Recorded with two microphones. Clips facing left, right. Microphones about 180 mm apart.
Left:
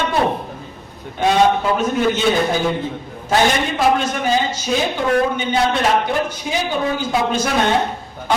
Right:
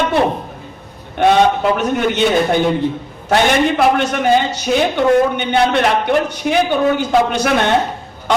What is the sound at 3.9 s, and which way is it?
A man's voice, 65° right (ahead or behind).